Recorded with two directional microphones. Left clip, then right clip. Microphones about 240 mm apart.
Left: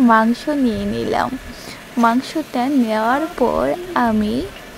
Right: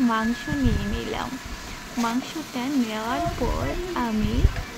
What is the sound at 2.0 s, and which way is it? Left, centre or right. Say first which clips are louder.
Speech: left 11 dB; left.